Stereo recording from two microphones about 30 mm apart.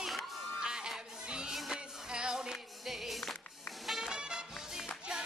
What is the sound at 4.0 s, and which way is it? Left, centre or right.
Music, right.